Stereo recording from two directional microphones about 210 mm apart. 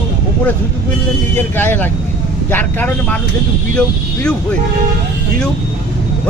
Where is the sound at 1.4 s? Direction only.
10° left (ahead or behind).